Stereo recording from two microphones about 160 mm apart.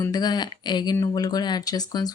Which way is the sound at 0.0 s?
25° left (ahead or behind).